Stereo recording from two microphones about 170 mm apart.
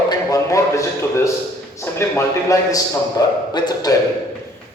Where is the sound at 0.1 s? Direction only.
20° left (ahead or behind).